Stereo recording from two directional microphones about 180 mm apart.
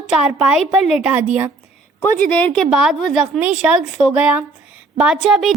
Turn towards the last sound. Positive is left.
turn(degrees=0)  # may be behind; listen again after turning